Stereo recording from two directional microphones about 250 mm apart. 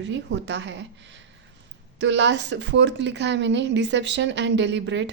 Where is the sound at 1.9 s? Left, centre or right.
Right.